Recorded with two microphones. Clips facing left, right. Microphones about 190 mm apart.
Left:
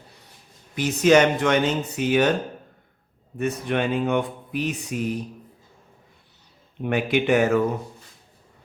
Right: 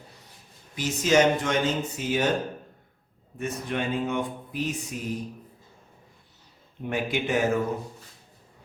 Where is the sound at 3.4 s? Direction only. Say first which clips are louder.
Left 6 dB; 70° left (ahead or behind).